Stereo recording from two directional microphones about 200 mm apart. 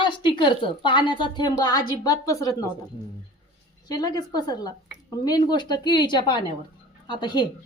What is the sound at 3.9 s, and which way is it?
Speech, 20° left (ahead or behind).